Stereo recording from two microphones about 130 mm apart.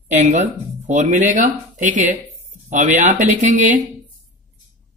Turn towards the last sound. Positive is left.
turn(degrees=-85)